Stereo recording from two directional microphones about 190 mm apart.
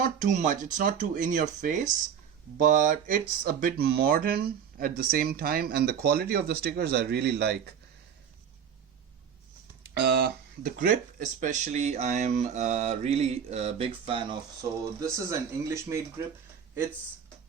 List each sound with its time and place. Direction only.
0.0 s speech: 40° right (ahead or behind); by 7.5 s 55° right (ahead or behind)
9.8 s speech: 55° right (ahead or behind); by 16.0 s 15° right (ahead or behind)